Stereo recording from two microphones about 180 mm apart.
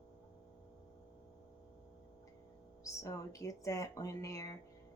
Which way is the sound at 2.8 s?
15° left (ahead or behind).